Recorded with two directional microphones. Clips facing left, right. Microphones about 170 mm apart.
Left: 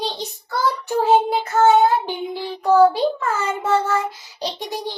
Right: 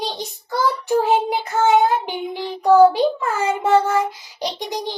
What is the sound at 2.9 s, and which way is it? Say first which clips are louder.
A child's voice: right 1 dB; 15° right (ahead or behind).